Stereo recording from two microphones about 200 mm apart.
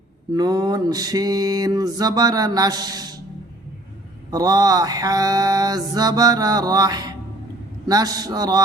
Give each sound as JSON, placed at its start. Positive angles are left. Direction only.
{"t": 0.3, "sound": "mantra", "side_deg": -20}
{"t": 4.3, "sound": "mantra", "side_deg": -20}